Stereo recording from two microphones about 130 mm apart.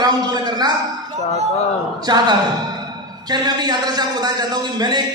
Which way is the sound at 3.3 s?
30° right (ahead or behind).